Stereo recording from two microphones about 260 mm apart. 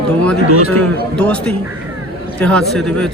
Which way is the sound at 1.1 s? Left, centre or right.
Centre.